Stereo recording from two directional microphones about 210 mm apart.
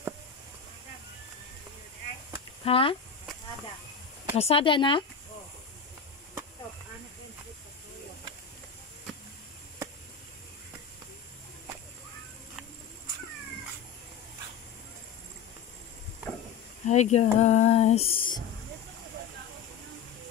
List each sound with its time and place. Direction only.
2.6 s speech: 25° left (ahead or behind)
4.4 s speech: 25° left (ahead or behind)
16.8 s speech: 35° left (ahead or behind)